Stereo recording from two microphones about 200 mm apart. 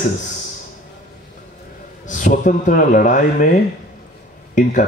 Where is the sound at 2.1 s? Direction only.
40° left (ahead or behind).